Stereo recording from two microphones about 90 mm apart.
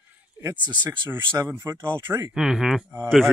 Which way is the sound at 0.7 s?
60° right (ahead or behind).